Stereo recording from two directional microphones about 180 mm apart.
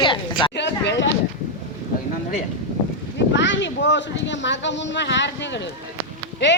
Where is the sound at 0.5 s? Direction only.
75° left (ahead or behind).